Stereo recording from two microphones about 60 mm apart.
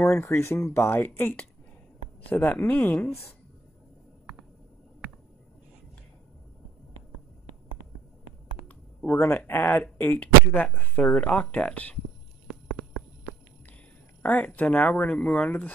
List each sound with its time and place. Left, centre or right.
0.2 s speech: left
8.6 s a sound: left
9.5 s speech: left
14.2 s speech: left